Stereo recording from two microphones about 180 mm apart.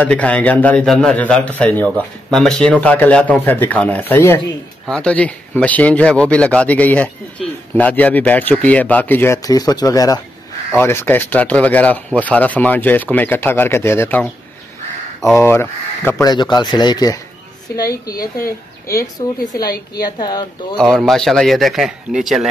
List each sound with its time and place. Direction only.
0.0 s speech: 5° left (ahead or behind)
15.3 s speech: 15° left (ahead or behind)
20.7 s a man's voice: centre (ahead or behind)